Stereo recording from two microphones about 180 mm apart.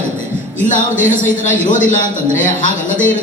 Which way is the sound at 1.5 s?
45° left (ahead or behind).